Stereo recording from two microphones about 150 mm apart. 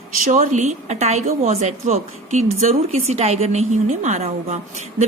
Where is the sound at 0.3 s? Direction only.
55° right (ahead or behind).